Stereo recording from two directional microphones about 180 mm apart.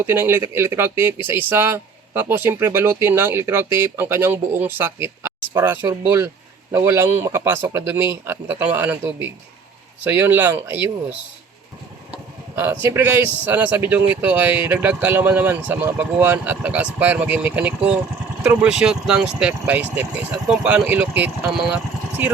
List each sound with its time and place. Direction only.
0.0 s speech: 10° right (ahead or behind)
12.1 s a sound: 15° right (ahead or behind)
12.8 s speech: 10° right (ahead or behind)